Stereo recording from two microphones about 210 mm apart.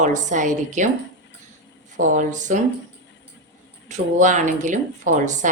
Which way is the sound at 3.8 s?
35° right (ahead or behind).